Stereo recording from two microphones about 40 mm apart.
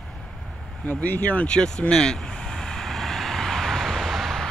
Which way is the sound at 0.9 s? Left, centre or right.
Left.